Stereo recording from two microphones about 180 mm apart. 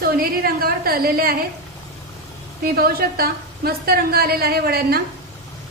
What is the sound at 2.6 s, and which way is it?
A woman's voice, 60° right (ahead or behind).